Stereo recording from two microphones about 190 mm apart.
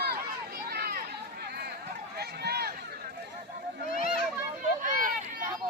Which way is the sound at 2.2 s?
55° right (ahead or behind).